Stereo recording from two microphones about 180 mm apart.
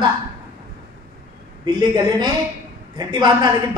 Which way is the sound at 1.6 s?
25° right (ahead or behind).